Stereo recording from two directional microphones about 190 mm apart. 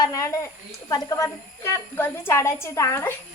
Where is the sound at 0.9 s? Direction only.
15° left (ahead or behind).